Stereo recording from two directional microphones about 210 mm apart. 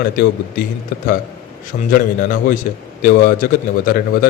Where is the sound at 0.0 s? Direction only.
45° left (ahead or behind).